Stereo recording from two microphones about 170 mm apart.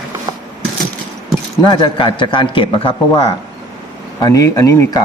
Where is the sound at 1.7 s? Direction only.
30° left (ahead or behind).